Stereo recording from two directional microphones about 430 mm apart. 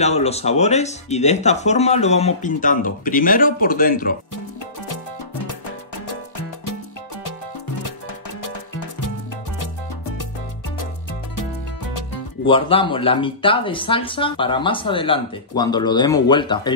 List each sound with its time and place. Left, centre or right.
0.0 s a man's voice: centre
12.4 s speech: centre